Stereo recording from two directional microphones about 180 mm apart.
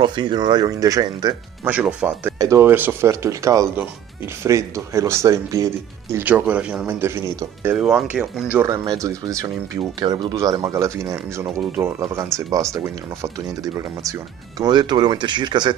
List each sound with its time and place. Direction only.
0.0 s speech: 25° right (ahead or behind)
1.7 s speech: 5° right (ahead or behind)
2.3 s speech: 15° right (ahead or behind)
7.7 s speech: 5° right (ahead or behind); by 15.7 s 25° right (ahead or behind)